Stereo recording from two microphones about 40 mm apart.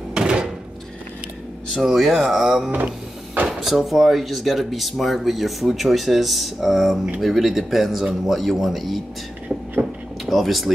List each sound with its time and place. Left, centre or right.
0.1 s door: centre
1.7 s speech: centre
2.1 s speech: centre
10.2 s speech: centre